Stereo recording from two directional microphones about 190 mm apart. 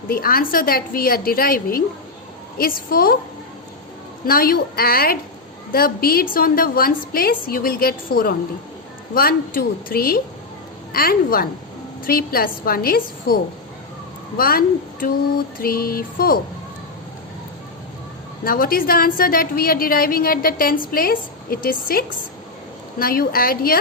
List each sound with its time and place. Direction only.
0.1 s a woman's voice: 50° left (ahead or behind)
4.3 s a woman's voice: 50° left (ahead or behind)
18.4 s a woman's voice: 50° left (ahead or behind)